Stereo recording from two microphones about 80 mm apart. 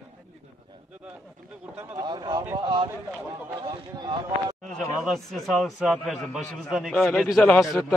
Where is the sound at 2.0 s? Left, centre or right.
Right.